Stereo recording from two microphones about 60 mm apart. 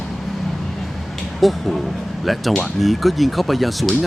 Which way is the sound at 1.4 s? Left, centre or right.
Centre.